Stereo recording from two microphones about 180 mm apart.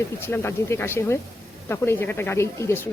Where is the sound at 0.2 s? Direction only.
15° left (ahead or behind).